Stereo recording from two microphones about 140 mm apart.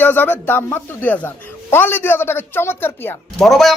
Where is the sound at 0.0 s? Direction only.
15° left (ahead or behind).